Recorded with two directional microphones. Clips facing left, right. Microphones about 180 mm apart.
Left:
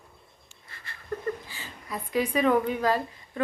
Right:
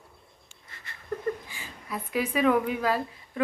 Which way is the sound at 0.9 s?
20° right (ahead or behind).